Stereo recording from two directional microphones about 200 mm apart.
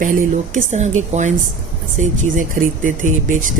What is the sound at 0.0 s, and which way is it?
Speech, 40° right (ahead or behind).